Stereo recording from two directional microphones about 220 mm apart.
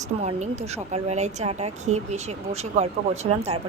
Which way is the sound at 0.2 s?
30° right (ahead or behind).